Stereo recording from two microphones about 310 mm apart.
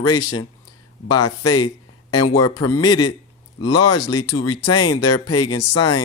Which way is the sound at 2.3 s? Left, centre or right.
Centre.